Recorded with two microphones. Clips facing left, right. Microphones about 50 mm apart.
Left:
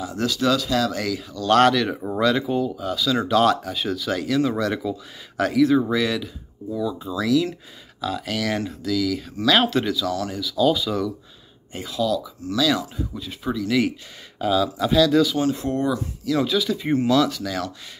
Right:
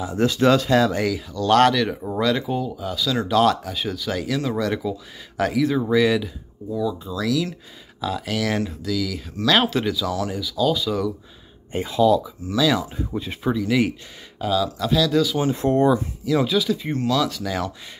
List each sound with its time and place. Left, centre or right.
0.0 s speech: right
1.0 s speech: centre
11.7 s speech: right
12.9 s speech: right
13.4 s speech: centre
14.4 s speech: centre
15.5 s speech: right
16.3 s speech: centre
17.2 s speech: centre